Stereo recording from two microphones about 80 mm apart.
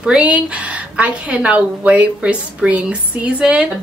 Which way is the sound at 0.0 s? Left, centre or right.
Centre.